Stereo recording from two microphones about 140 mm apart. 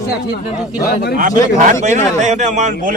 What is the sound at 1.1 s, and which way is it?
A man's voice, 70° right (ahead or behind).